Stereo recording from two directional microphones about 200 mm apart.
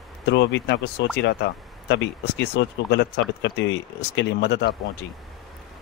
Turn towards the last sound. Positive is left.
turn(degrees=55)  # may be behind; listen again after turning